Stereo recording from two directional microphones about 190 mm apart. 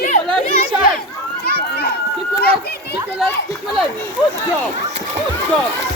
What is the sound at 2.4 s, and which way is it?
Children playing, 55° left (ahead or behind).